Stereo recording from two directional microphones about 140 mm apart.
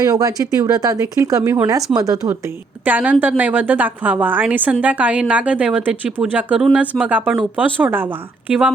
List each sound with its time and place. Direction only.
0.0 s speech: 25° right (ahead or behind)
2.8 s a woman's voice: 10° right (ahead or behind)